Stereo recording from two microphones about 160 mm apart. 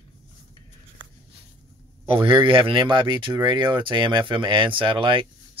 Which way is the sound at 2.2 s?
35° right (ahead or behind).